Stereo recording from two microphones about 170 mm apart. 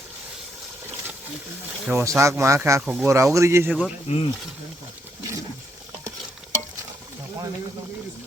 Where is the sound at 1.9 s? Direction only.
15° right (ahead or behind).